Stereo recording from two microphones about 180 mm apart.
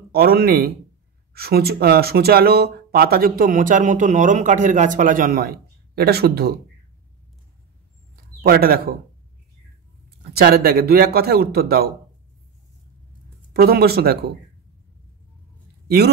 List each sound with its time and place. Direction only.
0.1 s speech: 60° right (ahead or behind)
8.4 s speech: 55° right (ahead or behind)
10.3 s speech: 60° right (ahead or behind)
13.5 s speech: 55° right (ahead or behind)